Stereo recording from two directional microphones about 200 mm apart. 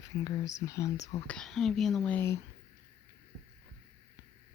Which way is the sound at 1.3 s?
Centre (ahead or behind).